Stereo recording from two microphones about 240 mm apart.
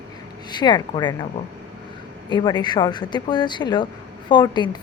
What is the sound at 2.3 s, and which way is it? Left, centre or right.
A woman's voice, centre.